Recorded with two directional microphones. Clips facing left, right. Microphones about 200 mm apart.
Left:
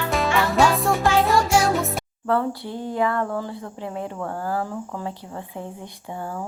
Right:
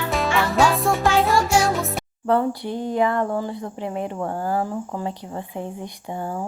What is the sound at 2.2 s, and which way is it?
Speech, 15° right (ahead or behind).